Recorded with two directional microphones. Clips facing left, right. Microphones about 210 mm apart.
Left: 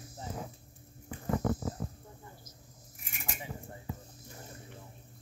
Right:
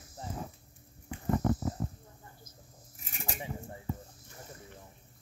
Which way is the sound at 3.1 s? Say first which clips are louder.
Right 3 dB; 35° right (ahead or behind).